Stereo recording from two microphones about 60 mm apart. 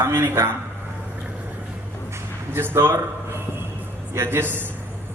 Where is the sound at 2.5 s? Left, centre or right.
Right.